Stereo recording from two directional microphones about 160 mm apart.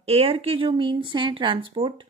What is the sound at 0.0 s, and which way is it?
A woman's voice, 35° right (ahead or behind).